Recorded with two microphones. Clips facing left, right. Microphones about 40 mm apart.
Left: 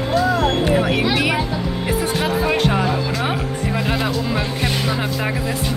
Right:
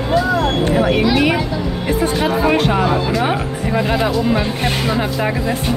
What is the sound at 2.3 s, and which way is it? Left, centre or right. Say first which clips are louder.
Speech: right 4 dB; centre.